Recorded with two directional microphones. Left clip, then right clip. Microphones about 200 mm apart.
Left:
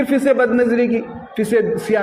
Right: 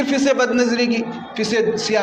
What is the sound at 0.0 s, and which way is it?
A man's voice, 50° left (ahead or behind).